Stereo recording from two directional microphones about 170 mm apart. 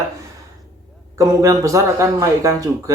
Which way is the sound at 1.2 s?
20° right (ahead or behind).